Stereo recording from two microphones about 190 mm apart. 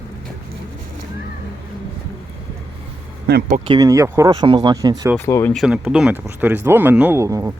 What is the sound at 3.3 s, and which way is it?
Speech, 45° right (ahead or behind).